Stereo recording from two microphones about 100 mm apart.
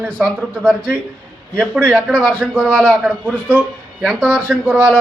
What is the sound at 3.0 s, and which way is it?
A man's voice, 15° right (ahead or behind).